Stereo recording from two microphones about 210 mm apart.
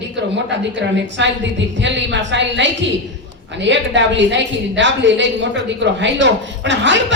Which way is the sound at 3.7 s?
60° right (ahead or behind).